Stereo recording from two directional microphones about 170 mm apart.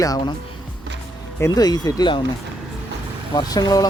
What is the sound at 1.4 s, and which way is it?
Speech, 20° left (ahead or behind).